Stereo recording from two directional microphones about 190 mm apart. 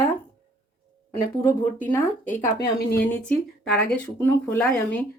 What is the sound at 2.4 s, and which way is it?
Speech, 55° left (ahead or behind).